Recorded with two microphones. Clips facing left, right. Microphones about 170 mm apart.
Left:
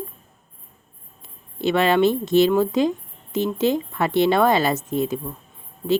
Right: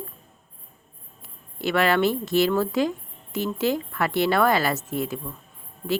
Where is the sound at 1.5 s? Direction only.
20° left (ahead or behind).